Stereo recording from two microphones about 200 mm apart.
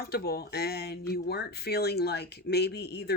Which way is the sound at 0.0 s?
50° left (ahead or behind).